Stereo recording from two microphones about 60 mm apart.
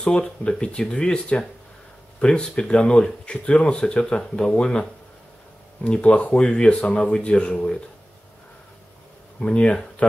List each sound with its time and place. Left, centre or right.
0.0 s speech: centre
9.4 s speech: centre